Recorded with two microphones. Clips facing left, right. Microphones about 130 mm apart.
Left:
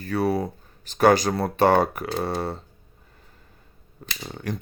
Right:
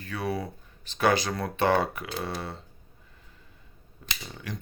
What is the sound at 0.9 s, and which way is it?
Speech, 40° left (ahead or behind).